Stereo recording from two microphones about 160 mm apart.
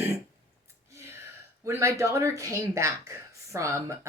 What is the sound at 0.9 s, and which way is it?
Gasp, 15° right (ahead or behind).